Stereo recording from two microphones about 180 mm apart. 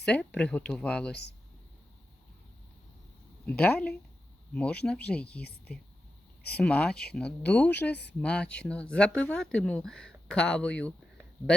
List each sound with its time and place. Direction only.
0.0 s speech: 5° left (ahead or behind)
3.4 s speech: 10° left (ahead or behind)
5.4 s speech: 60° left (ahead or behind)
6.6 s speech: 5° left (ahead or behind)